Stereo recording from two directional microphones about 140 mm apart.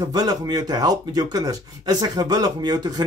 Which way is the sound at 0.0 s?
25° right (ahead or behind).